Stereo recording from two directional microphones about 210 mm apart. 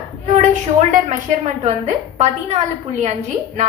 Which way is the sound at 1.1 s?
35° right (ahead or behind).